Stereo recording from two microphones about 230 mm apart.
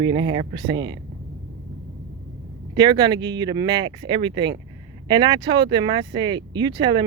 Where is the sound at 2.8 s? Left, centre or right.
Centre.